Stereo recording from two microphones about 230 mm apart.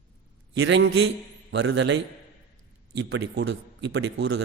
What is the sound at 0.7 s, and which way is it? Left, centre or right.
A man's voice, right.